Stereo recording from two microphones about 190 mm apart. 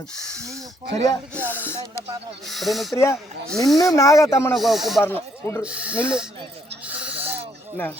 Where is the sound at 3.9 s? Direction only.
15° left (ahead or behind).